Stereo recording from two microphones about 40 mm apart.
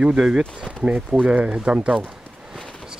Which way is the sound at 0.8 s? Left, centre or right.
Right.